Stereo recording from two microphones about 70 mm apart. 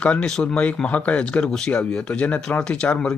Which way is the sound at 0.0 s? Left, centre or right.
Centre.